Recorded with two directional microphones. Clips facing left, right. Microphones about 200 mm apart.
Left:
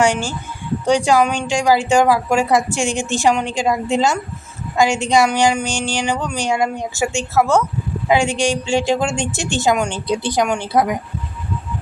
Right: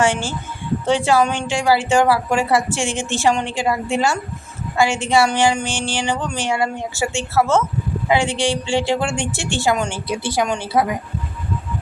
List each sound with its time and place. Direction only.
0.0 s a woman's voice: 15° left (ahead or behind)